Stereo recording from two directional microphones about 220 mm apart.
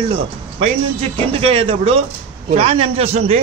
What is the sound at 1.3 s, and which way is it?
A man's voice, 25° right (ahead or behind).